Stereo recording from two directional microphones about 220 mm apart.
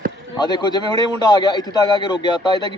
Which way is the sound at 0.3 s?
20° left (ahead or behind).